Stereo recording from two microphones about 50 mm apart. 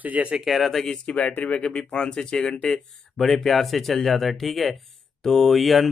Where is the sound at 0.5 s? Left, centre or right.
Centre.